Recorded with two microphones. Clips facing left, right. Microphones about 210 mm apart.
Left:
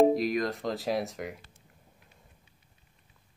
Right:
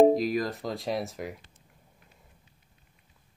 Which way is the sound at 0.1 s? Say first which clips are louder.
Right 1 dB; centre (ahead or behind).